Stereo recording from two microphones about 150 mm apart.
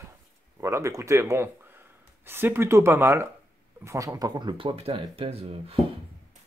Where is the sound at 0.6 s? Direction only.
20° right (ahead or behind); by 5.8 s 40° right (ahead or behind).